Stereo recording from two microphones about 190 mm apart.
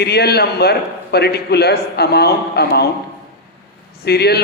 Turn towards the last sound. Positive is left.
turn(degrees=60)  # may be behind; listen again after turning